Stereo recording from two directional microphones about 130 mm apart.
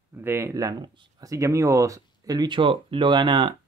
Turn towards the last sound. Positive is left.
turn(degrees=-40)  # may be behind; listen again after turning